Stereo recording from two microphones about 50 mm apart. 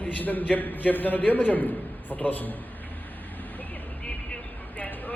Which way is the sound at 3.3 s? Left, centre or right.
Left.